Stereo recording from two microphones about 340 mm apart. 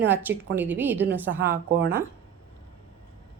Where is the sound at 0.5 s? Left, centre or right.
Centre.